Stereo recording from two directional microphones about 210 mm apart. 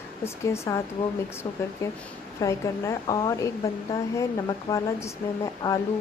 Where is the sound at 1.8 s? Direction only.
15° left (ahead or behind).